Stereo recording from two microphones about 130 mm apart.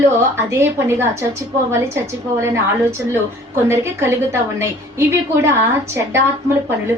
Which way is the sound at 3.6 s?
20° right (ahead or behind).